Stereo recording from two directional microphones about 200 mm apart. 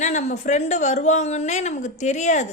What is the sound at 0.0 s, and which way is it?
A woman's voice, 35° left (ahead or behind).